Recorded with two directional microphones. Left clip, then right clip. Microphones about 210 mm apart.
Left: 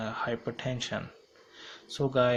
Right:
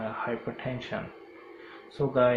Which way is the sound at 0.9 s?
55° left (ahead or behind).